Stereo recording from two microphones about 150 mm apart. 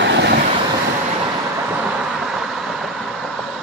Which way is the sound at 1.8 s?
5° right (ahead or behind).